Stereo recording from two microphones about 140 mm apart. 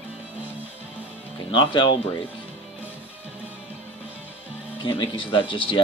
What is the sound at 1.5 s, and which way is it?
Speech, 35° left (ahead or behind).